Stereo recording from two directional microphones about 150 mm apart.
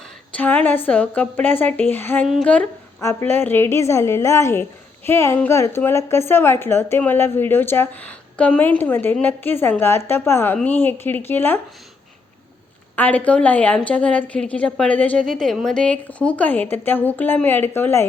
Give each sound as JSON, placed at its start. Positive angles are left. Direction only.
{"t": 0.3, "sound": "a woman's voice", "side_deg": 10}
{"t": 2.2, "sound": "speech", "side_deg": 0}
{"t": 2.5, "sound": "a woman's voice", "side_deg": 15}
{"t": 13.0, "sound": "a woman's voice", "side_deg": 10}